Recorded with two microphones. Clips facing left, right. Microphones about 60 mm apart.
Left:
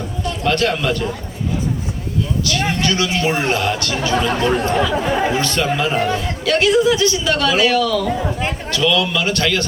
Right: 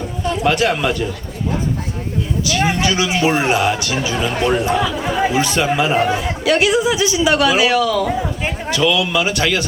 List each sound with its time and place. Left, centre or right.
0.3 s a man's voice: centre
2.4 s speech: centre